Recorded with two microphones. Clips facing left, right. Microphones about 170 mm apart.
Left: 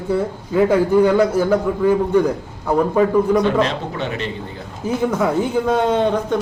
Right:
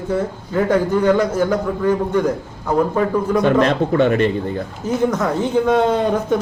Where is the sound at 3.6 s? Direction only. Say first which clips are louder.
Right 7 dB; 55° right (ahead or behind).